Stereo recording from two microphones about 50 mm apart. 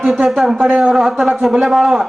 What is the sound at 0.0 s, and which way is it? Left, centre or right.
A man's voice, centre.